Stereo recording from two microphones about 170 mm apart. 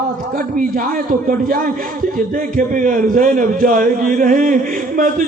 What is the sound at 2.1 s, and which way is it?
A man's voice, 50° right (ahead or behind).